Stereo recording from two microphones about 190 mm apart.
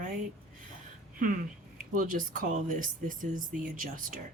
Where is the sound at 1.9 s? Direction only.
45° right (ahead or behind).